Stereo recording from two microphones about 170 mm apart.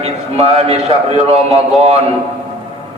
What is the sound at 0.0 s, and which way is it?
A man's voice, 40° right (ahead or behind).